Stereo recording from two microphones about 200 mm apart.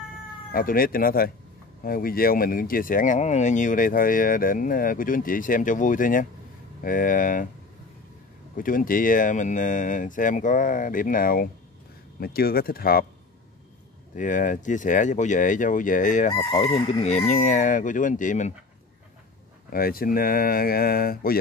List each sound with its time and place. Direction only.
0.5 s speech: 45° left (ahead or behind)
8.5 s speech: 45° left (ahead or behind)
14.1 s speech: 40° left (ahead or behind)
16.3 s chicken: 30° left (ahead or behind)
16.8 s speech: 30° left (ahead or behind)
19.7 s speech: 45° left (ahead or behind)